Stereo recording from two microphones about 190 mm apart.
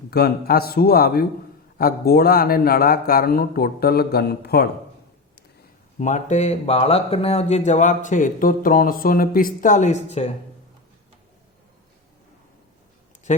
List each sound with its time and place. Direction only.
0.1 s a man's voice: 55° left (ahead or behind)
6.0 s speech: 40° left (ahead or behind)